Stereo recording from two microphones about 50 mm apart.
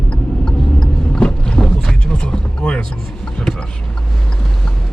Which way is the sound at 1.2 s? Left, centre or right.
Centre.